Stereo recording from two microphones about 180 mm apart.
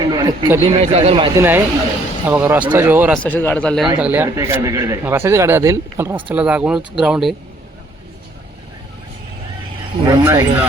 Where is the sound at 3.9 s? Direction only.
10° right (ahead or behind).